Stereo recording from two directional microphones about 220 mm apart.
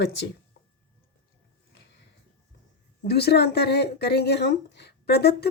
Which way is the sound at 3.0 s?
50° left (ahead or behind).